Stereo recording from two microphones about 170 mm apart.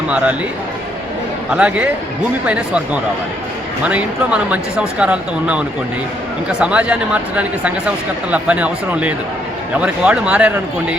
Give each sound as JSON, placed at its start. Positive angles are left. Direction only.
{"t": 1.5, "sound": "speech", "side_deg": -5}